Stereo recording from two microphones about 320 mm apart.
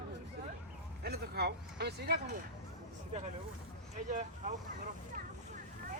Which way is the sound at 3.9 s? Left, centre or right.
Right.